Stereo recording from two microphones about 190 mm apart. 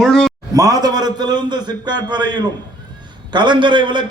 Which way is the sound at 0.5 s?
20° right (ahead or behind).